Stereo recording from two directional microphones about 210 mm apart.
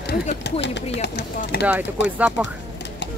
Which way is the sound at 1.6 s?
10° right (ahead or behind).